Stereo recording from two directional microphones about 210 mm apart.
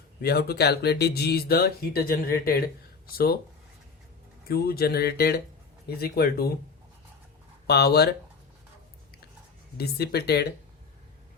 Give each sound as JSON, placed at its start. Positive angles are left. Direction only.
{"t": 0.2, "sound": "speech", "side_deg": 50}
{"t": 4.4, "sound": "speech", "side_deg": 50}
{"t": 7.7, "sound": "speech", "side_deg": 50}
{"t": 9.7, "sound": "speech", "side_deg": 50}